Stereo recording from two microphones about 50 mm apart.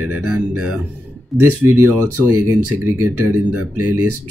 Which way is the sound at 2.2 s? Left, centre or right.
Right.